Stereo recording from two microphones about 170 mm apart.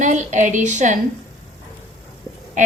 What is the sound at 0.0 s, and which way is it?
Speech, 45° right (ahead or behind).